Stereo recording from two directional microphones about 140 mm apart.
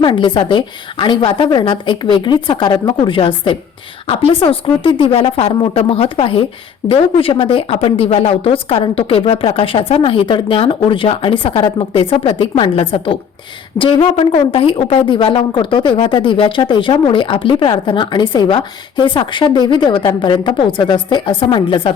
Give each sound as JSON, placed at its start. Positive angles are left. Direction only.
{"t": 0.0, "sound": "a woman's voice", "side_deg": 35}